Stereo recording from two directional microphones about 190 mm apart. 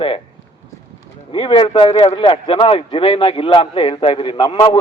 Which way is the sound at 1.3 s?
25° left (ahead or behind).